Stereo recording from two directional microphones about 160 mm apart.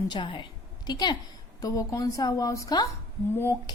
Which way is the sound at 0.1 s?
30° left (ahead or behind).